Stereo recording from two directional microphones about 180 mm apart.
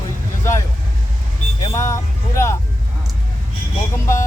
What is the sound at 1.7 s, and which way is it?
Speech, 15° left (ahead or behind).